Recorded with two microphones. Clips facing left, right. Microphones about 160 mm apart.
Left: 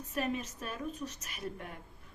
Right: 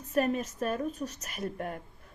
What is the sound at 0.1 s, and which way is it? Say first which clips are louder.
A woman's voice: right 7 dB; 45° right (ahead or behind).